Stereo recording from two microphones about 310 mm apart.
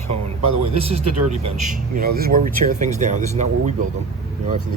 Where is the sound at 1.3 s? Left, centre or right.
Right.